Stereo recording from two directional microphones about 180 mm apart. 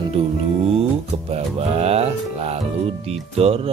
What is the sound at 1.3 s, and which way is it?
Music, 35° right (ahead or behind).